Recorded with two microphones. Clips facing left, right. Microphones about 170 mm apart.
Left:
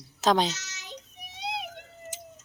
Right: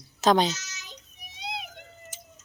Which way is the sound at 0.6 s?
65° left (ahead or behind).